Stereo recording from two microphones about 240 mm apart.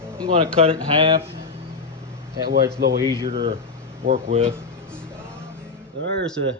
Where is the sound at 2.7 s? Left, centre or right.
Right.